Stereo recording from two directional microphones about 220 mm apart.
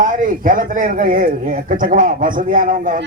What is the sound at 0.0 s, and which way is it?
Speech, 35° right (ahead or behind).